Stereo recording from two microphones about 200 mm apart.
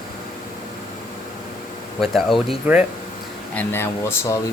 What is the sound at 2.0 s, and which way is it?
Speech, centre (ahead or behind).